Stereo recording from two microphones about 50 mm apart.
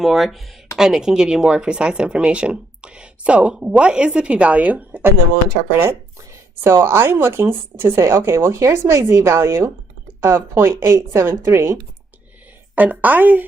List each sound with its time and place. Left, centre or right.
0.0 s speech: centre; by 5.0 s right
6.6 s speech: right
7.9 s speech: right
12.7 s a woman's voice: right